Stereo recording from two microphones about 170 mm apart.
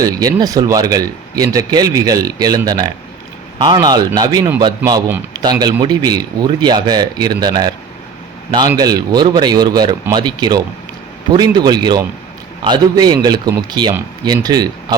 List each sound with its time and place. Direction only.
0.0 s speech: 20° right (ahead or behind)